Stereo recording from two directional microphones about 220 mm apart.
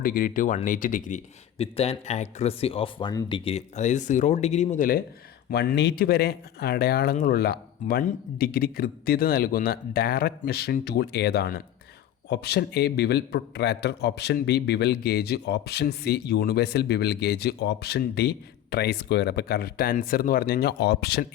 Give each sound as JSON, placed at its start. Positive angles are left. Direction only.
{"t": 0.0, "sound": "speech", "side_deg": 40}
{"t": 5.5, "sound": "a man's voice", "side_deg": 50}